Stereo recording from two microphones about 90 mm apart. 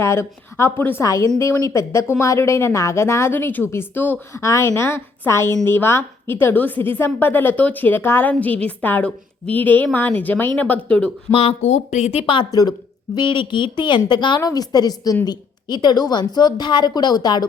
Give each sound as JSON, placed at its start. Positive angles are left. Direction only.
{"t": 0.0, "sound": "a woman's voice", "side_deg": 30}
{"t": 4.4, "sound": "a woman's voice", "side_deg": 35}
{"t": 12.2, "sound": "a woman's voice", "side_deg": 70}
{"t": 12.5, "sound": "a woman's voice", "side_deg": 45}
{"t": 13.1, "sound": "a woman's voice", "side_deg": 65}